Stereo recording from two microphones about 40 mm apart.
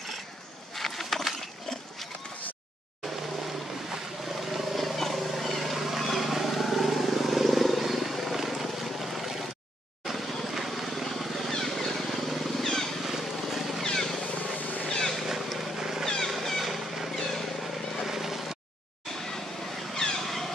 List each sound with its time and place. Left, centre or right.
0.7 s a sound: centre
4.4 s vehicle: centre
13.0 s vehicle: centre
13.9 s vehicle: centre
14.2 s vehicle: left
14.9 s vehicle: centre
15.5 s cat: centre
16.3 s vehicle: centre
17.1 s vehicle: centre
18.0 s vehicle: centre
19.9 s vehicle: centre
20.2 s vehicle: centre